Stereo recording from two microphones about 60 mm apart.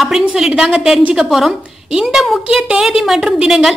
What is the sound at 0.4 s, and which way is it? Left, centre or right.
A woman's voice, centre.